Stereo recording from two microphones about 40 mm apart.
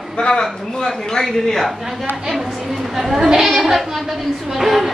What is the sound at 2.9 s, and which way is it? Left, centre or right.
A woman's voice, centre.